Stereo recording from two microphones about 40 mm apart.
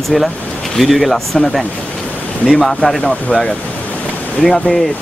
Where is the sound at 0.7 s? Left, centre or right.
Centre.